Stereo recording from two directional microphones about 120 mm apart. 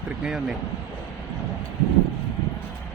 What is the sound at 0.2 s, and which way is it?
Speech, 5° right (ahead or behind).